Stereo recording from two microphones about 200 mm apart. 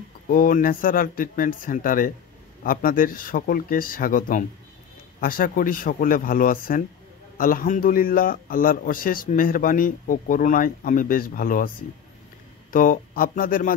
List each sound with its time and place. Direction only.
0.3 s a man's voice: 45° left (ahead or behind)
12.7 s a man's voice: 45° left (ahead or behind)